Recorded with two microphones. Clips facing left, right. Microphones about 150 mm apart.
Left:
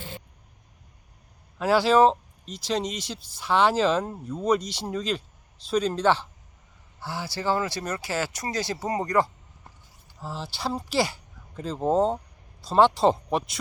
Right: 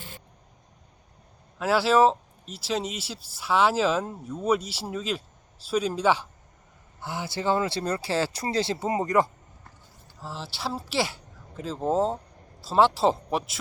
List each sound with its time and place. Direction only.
1.5 s speech: centre (ahead or behind)
7.0 s speech: 20° right (ahead or behind)
10.2 s speech: centre (ahead or behind)